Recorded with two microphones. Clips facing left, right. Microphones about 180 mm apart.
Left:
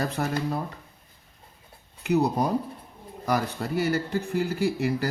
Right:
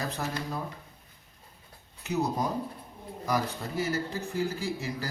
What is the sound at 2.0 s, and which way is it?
Speech, 65° left (ahead or behind).